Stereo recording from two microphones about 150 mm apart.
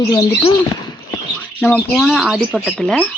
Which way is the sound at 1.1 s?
10° left (ahead or behind).